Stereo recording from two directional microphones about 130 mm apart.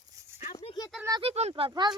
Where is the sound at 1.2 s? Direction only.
50° right (ahead or behind).